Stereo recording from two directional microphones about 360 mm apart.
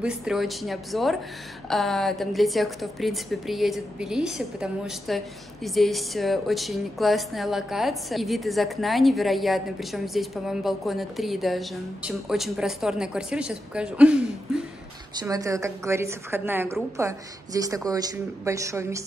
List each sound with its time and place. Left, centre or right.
0.0 s a woman's voice: centre